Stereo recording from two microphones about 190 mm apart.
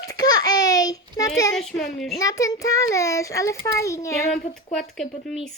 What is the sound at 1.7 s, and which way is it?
Speech, 55° left (ahead or behind).